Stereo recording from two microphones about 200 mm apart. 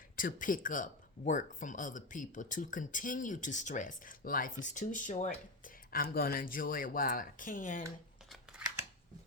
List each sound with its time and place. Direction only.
0.2 s speech: 40° left (ahead or behind)